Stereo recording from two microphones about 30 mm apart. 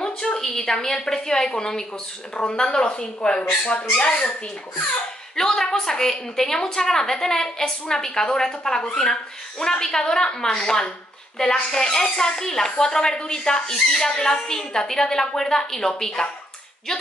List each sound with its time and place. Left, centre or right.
0.0 s a sound: left
0.4 s a woman's voice: centre
2.3 s a woman's voice: left
3.6 s speech: left
5.3 s a woman's voice: centre